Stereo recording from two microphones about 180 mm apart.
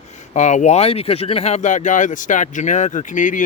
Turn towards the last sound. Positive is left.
turn(degrees=45)  # may be behind; listen again after turning